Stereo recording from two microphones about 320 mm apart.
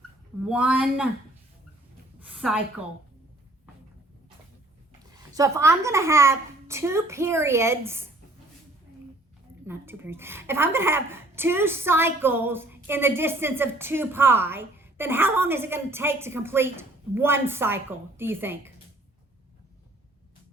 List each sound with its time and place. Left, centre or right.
0.4 s speech: centre
2.2 s a woman's voice: centre
5.1 s a woman's voice: centre
9.6 s a woman's voice: centre